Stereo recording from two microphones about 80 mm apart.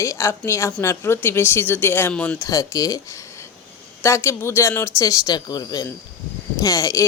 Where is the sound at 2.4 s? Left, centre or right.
Left.